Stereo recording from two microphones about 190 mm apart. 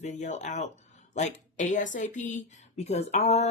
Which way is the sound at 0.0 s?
40° left (ahead or behind).